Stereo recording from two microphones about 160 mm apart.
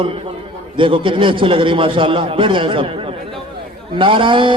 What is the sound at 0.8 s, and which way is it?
A man's voice, 30° right (ahead or behind).